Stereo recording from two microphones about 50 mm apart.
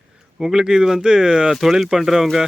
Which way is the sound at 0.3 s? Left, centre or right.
Centre.